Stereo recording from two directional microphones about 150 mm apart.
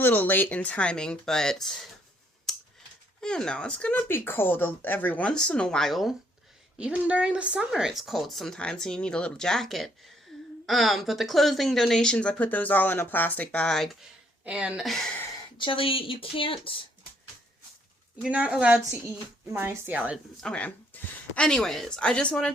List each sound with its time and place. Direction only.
0.0 s speech: 10° left (ahead or behind)
2.5 s computer keyboard: centre (ahead or behind)
3.2 s speech: 5° left (ahead or behind)
15.5 s speech: 35° left (ahead or behind)
18.2 s speech: 10° right (ahead or behind)
20.4 s speech: 10° left (ahead or behind)